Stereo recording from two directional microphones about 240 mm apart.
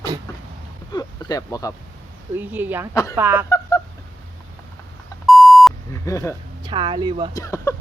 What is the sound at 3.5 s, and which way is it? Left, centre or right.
Fowl, centre.